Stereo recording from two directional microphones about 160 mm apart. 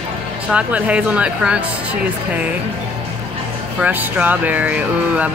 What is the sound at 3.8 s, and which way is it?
Speech, 10° right (ahead or behind).